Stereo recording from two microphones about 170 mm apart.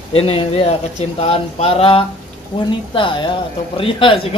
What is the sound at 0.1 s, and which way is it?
Speech, 35° left (ahead or behind).